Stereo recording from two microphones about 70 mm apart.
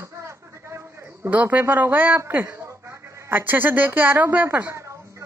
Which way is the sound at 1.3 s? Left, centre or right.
Right.